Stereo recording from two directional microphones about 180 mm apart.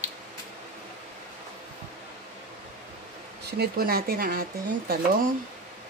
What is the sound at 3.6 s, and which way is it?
Speech, 55° right (ahead or behind).